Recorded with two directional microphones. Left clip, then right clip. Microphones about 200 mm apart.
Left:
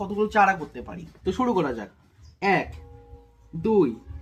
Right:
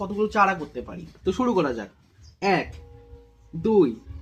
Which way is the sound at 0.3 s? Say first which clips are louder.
Left 1 dB; 40° left (ahead or behind).